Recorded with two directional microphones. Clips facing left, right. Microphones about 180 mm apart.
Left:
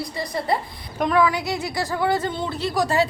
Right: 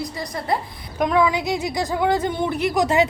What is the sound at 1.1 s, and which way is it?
Speech, 20° right (ahead or behind).